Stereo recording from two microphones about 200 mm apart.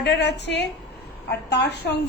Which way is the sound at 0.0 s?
60° left (ahead or behind).